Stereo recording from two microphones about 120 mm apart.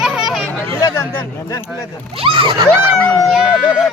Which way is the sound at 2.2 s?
45° right (ahead or behind).